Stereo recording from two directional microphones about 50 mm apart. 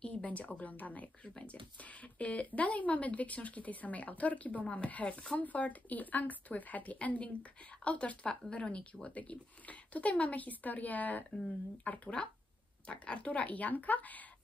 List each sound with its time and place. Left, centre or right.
0.0 s speech: left